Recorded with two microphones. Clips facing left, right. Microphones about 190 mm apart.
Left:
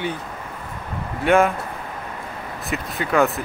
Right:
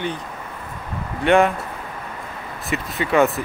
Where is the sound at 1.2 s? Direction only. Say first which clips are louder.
Right 1 dB; centre (ahead or behind).